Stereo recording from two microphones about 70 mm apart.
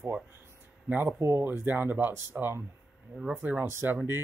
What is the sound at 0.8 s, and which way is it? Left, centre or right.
Speech, right.